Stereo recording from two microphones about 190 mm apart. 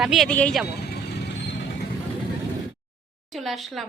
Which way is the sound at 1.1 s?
65° left (ahead or behind).